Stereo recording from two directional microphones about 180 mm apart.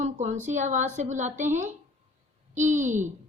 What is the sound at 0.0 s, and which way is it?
A woman's voice, 40° right (ahead or behind).